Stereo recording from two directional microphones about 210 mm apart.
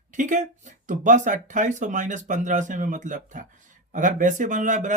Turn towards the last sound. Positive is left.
turn(degrees=-35)  # may be behind; listen again after turning